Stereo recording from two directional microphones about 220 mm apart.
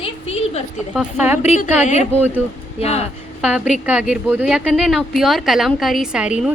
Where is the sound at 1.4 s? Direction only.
30° left (ahead or behind).